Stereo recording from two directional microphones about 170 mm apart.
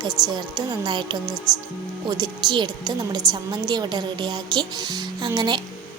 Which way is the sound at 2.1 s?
25° right (ahead or behind).